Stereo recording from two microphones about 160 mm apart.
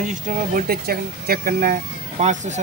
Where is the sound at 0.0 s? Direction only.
50° right (ahead or behind).